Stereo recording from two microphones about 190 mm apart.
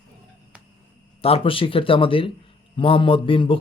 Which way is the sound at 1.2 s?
30° left (ahead or behind).